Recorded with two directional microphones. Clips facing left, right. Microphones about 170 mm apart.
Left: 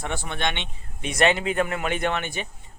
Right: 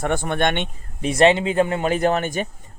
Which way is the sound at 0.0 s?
50° right (ahead or behind).